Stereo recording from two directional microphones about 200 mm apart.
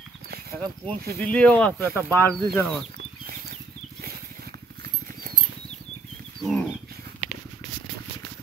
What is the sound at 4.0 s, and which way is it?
Dog, 50° right (ahead or behind).